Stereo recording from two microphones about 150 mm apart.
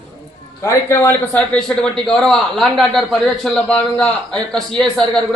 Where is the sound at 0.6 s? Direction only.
20° left (ahead or behind).